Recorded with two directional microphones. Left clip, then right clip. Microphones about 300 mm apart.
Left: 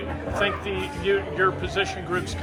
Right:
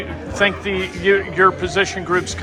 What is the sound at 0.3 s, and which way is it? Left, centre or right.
A man's voice, right.